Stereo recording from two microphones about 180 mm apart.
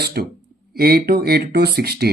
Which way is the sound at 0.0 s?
60° right (ahead or behind).